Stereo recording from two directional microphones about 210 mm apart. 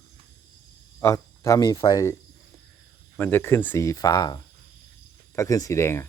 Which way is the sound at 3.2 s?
10° left (ahead or behind).